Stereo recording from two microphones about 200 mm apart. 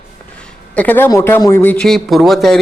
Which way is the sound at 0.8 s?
10° left (ahead or behind).